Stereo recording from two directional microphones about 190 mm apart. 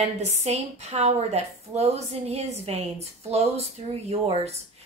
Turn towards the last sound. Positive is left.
turn(degrees=-30)  # may be behind; listen again after turning